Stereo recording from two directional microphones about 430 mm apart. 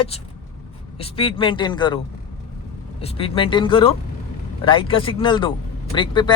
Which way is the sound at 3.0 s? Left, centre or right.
Centre.